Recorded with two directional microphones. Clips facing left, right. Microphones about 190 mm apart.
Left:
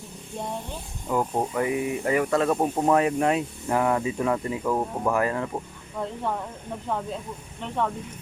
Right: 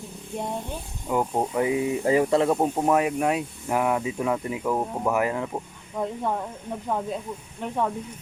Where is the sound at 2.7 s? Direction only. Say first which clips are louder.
Left 1 dB; 5° right (ahead or behind).